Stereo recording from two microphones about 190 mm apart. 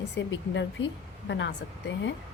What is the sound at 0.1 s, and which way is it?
Speech, 70° left (ahead or behind).